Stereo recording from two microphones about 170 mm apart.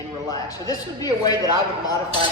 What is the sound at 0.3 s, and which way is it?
A man's voice, 20° left (ahead or behind).